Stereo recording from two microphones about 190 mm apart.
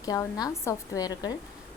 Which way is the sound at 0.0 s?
20° left (ahead or behind).